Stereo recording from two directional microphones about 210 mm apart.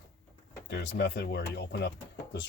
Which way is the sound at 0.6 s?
55° left (ahead or behind).